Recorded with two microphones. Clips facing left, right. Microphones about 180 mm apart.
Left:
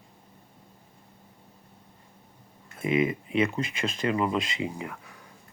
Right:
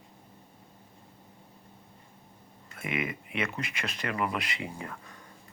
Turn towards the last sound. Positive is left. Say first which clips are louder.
# left 5 dB
turn(degrees=10)  # may be behind; listen again after turning